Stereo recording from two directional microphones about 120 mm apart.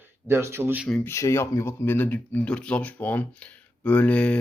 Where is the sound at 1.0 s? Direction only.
25° left (ahead or behind).